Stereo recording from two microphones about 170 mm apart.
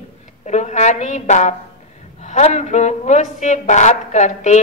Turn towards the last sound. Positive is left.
turn(degrees=45)  # may be behind; listen again after turning